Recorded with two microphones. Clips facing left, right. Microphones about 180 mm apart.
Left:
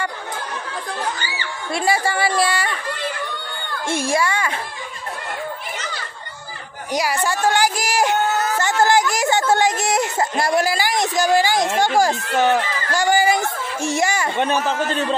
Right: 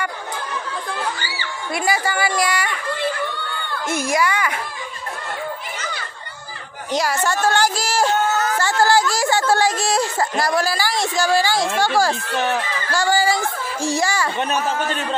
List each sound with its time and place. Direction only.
1.2 s a woman's voice: 25° left (ahead or behind)
3.8 s speech: 30° left (ahead or behind)
6.9 s speech: 10° left (ahead or behind)